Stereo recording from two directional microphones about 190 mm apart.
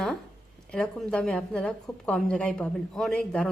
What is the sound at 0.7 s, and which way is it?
A woman's voice, 5° left (ahead or behind).